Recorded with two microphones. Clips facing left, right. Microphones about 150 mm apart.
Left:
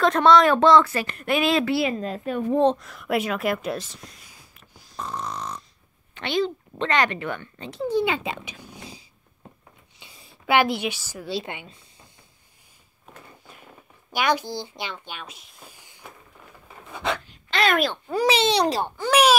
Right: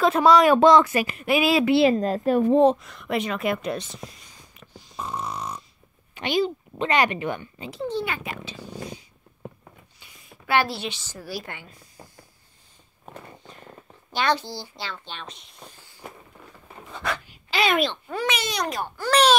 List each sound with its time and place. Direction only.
0.0 s speech: 5° right (ahead or behind)
1.1 s speech: 5° right (ahead or behind)
1.7 s a woman's voice: 30° right (ahead or behind)
2.0 s a woman's voice: 40° right (ahead or behind)
2.6 s speech: 5° right (ahead or behind)
7.9 s a child's voice: 20° left (ahead or behind)
9.9 s a sound: 30° left (ahead or behind)
10.4 s speech: 15° left (ahead or behind)
11.2 s a child's voice: 20° left (ahead or behind)
14.1 s speech: 15° left (ahead or behind)
17.3 s a sound: 5° right (ahead or behind)
18.0 s a child's voice: 30° left (ahead or behind)
18.9 s speech: 10° left (ahead or behind)